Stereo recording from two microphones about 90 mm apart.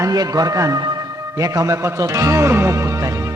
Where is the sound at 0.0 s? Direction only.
45° right (ahead or behind).